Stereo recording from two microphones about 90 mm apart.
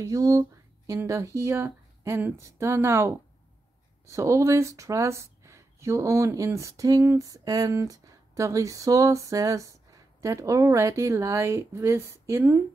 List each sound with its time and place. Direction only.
0.0 s speech: 40° right (ahead or behind)